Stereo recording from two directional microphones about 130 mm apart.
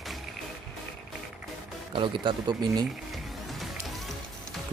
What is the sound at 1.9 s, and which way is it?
Speech, 40° right (ahead or behind).